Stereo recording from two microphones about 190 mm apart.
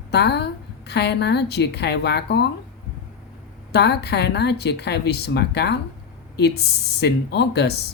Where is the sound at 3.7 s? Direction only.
60° left (ahead or behind).